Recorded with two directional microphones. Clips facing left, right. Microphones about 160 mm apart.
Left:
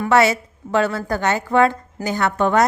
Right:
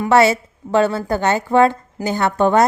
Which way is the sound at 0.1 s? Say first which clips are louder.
Right 3 dB; 30° right (ahead or behind).